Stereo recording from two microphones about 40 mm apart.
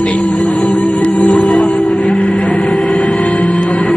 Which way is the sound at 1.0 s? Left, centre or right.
Left.